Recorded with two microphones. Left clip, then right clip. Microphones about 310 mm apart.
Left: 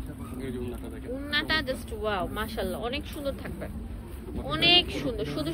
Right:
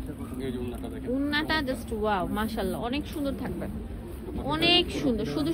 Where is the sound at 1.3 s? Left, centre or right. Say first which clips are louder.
Left 2 dB; centre.